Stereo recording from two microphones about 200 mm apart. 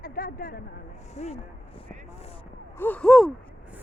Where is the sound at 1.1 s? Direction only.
35° left (ahead or behind).